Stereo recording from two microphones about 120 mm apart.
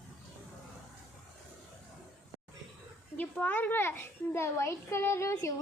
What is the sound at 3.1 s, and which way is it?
A child's voice, 15° left (ahead or behind).